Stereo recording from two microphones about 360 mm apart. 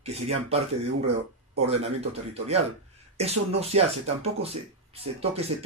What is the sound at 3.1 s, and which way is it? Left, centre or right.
Speech, centre.